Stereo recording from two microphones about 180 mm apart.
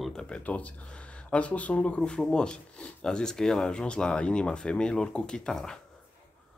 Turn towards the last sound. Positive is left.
turn(degrees=5)  # may be behind; listen again after turning